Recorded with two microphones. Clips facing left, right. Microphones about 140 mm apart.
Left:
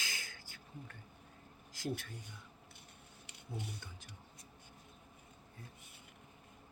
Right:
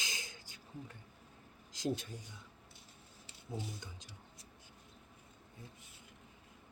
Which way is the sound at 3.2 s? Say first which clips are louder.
Right 2 dB; 65° left (ahead or behind).